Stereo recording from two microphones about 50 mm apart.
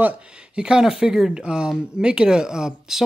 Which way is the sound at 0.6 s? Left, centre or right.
Centre.